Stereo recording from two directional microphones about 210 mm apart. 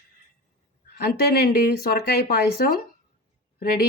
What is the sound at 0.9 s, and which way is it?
Speech, 50° left (ahead or behind).